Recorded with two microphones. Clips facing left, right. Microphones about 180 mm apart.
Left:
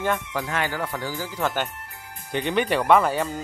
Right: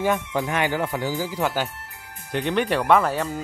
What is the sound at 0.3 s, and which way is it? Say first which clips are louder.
Speech: right 4 dB; 15° right (ahead or behind).